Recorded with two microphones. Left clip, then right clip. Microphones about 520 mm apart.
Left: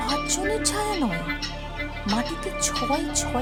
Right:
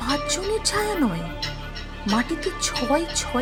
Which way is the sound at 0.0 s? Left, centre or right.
Left.